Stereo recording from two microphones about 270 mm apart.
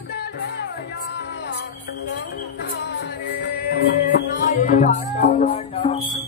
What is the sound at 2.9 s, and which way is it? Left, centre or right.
Music, left.